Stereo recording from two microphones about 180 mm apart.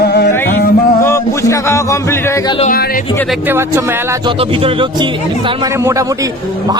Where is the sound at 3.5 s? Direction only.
15° right (ahead or behind).